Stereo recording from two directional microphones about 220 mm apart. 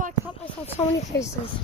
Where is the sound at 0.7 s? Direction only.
30° left (ahead or behind).